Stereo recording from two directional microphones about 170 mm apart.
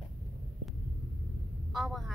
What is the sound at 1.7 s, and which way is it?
Speech, centre (ahead or behind).